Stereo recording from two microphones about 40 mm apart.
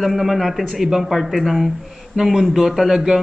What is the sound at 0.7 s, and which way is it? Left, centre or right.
Speech, centre.